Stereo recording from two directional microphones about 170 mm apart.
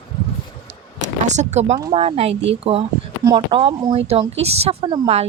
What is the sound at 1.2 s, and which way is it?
Speech, 45° right (ahead or behind).